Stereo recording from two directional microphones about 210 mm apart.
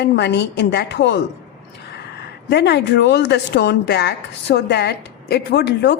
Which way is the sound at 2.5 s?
55° left (ahead or behind).